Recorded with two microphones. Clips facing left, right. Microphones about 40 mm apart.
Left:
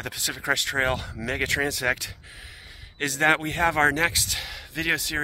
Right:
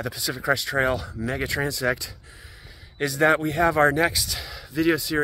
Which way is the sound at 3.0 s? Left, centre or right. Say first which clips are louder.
Right 2 dB; left.